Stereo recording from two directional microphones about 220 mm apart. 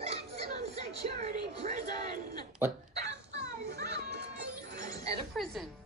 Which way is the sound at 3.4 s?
50° right (ahead or behind).